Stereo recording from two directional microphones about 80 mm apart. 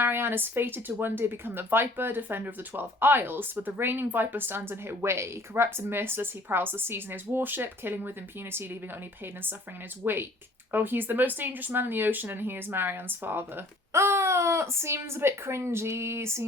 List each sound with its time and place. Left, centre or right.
0.0 s speech: right
9.2 s speech: right